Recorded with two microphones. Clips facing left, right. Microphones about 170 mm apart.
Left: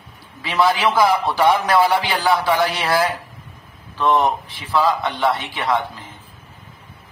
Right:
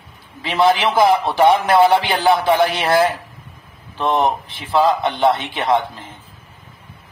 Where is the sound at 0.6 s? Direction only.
25° right (ahead or behind).